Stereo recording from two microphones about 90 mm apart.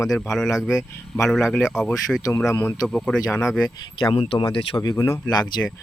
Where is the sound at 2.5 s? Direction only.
40° left (ahead or behind).